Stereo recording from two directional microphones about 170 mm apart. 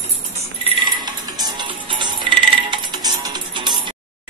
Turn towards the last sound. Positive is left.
turn(degrees=-25)  # may be behind; listen again after turning